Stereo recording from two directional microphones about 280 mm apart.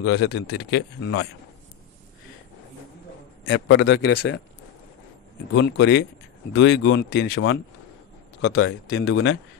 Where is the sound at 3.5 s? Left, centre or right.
Left.